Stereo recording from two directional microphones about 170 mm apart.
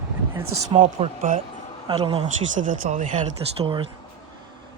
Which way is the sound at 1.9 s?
35° right (ahead or behind).